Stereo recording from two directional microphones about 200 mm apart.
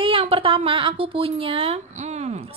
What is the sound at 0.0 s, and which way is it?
A woman's voice, 25° right (ahead or behind).